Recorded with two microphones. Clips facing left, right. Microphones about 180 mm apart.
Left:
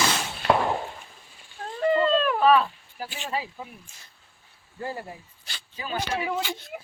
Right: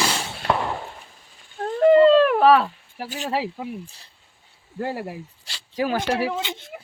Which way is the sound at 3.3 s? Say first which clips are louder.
Right 7 dB; 75° right (ahead or behind).